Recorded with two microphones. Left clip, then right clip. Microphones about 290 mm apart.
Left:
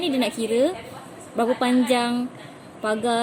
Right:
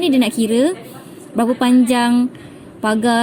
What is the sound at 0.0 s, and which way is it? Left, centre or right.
A woman's voice, centre.